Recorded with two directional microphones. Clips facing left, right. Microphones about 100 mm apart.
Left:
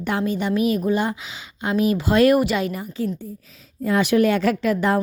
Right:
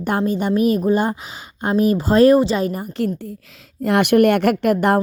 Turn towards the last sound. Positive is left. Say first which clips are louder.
# right 4 dB
turn(degrees=-60)  # may be behind; listen again after turning